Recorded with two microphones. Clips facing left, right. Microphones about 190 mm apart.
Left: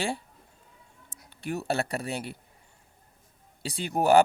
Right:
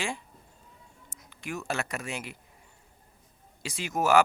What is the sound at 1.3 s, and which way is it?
Speech, 35° left (ahead or behind).